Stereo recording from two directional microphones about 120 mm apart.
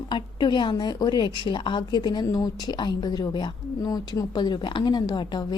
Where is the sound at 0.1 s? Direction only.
40° left (ahead or behind).